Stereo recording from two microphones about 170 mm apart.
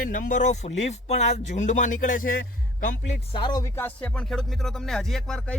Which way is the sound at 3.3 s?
25° left (ahead or behind).